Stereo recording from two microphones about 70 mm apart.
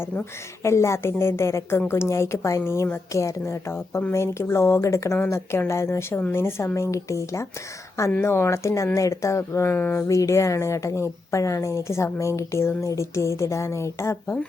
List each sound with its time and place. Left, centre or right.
0.6 s a woman's voice: left
9.6 s a woman's voice: left
10.1 s speech: left